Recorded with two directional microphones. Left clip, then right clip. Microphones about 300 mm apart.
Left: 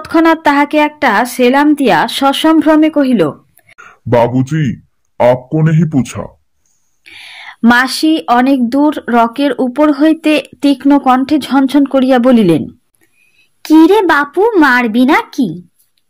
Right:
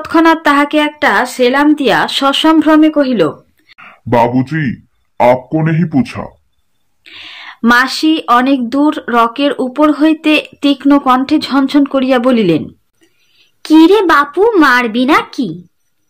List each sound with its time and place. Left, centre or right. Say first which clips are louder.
0.0 s speech: even; centre
3.7 s speech: left 1 dB; left
7.0 s speech: right 1 dB; left
13.8 s speech: right 1 dB; centre